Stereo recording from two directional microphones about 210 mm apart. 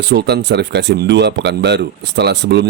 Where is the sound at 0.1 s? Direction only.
50° right (ahead or behind).